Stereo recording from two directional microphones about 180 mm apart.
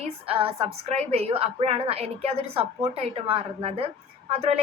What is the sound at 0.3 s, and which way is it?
A woman's voice, 30° right (ahead or behind).